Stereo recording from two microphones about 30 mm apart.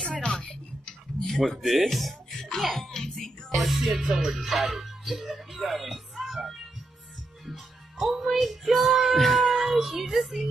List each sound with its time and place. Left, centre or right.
0.0 s a sound: left
1.2 s speech: centre
1.9 s music: centre
2.9 s speech: centre
3.5 s music: centre
3.9 s speech: centre